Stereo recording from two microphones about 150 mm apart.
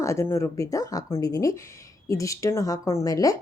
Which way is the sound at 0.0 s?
20° left (ahead or behind).